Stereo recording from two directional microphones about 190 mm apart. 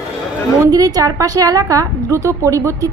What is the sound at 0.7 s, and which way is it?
A woman's voice, 20° right (ahead or behind).